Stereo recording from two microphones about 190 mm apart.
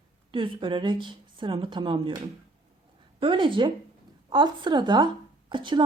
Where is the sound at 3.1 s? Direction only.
25° right (ahead or behind).